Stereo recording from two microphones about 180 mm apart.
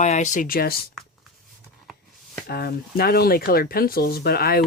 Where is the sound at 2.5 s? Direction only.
60° left (ahead or behind).